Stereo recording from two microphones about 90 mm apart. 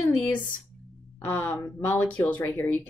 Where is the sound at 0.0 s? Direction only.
20° left (ahead or behind).